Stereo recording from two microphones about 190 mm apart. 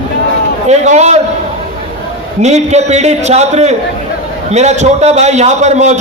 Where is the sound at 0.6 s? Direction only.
35° right (ahead or behind).